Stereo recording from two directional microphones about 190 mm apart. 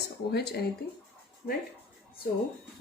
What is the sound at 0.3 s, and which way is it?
Speech, 60° left (ahead or behind).